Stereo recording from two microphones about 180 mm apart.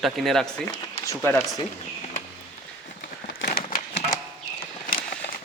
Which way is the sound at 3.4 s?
50° left (ahead or behind).